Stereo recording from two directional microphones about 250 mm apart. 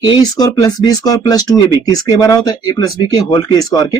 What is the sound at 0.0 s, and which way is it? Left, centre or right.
Speech, centre.